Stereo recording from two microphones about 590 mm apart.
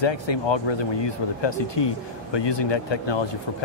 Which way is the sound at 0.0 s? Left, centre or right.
Left.